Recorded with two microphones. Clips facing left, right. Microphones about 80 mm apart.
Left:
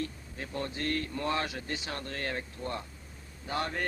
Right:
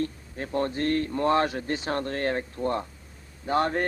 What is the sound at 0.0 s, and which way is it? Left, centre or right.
Speech, right.